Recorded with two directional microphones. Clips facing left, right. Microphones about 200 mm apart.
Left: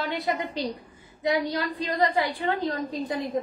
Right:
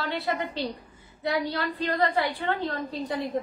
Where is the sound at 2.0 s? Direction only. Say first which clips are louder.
Left 3 dB; 15° left (ahead or behind).